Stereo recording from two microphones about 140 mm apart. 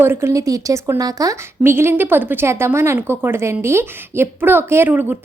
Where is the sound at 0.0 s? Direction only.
15° right (ahead or behind).